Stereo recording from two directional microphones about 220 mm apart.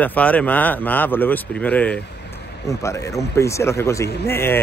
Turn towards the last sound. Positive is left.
turn(degrees=10)  # may be behind; listen again after turning